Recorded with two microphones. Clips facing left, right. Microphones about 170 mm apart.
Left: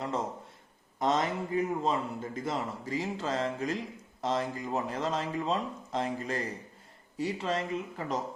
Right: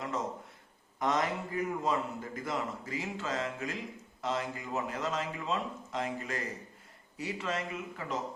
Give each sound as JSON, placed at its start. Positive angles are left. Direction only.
{"t": 0.9, "sound": "a man's voice", "side_deg": 25}